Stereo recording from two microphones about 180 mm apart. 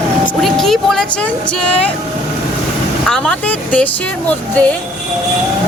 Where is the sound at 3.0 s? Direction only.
5° left (ahead or behind).